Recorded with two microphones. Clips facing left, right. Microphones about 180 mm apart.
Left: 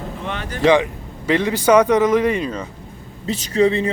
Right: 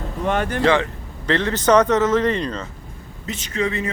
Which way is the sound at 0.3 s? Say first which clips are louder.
Right 9 dB; 50° right (ahead or behind).